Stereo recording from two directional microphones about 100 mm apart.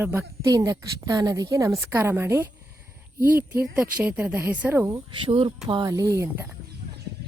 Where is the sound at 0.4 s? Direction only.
35° right (ahead or behind); by 4.9 s 20° right (ahead or behind).